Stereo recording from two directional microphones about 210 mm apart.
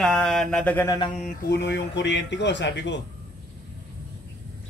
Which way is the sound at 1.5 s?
55° left (ahead or behind).